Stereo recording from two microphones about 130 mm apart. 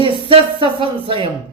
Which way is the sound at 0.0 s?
40° right (ahead or behind).